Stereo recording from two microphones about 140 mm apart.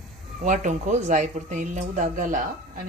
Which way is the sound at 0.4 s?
65° right (ahead or behind).